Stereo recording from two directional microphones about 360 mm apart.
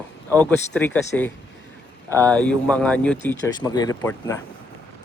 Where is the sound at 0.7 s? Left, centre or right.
Centre.